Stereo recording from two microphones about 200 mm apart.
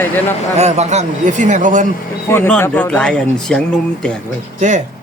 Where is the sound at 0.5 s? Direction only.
35° right (ahead or behind).